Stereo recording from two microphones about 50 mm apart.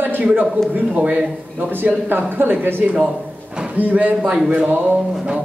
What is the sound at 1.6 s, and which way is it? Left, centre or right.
Speech, right.